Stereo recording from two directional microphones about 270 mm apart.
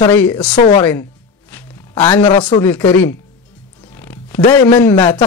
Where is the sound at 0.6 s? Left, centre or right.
Left.